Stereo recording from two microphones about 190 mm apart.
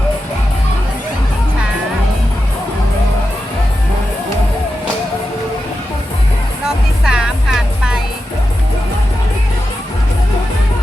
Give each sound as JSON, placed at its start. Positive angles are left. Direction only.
{"t": 6.7, "sound": "music", "side_deg": -5}